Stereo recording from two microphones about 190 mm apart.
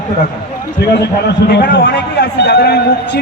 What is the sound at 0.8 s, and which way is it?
A man's voice, 60° left (ahead or behind).